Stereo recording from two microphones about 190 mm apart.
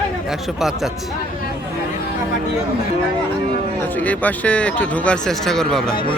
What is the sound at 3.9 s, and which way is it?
Speech, 10° left (ahead or behind).